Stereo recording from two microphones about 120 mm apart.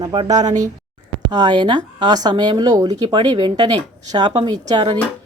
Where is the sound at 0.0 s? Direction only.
35° right (ahead or behind).